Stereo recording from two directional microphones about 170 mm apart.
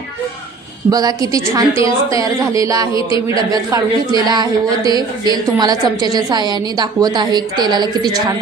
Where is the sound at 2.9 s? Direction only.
30° left (ahead or behind).